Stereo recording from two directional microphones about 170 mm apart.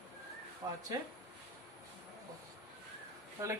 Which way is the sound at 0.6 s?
20° right (ahead or behind).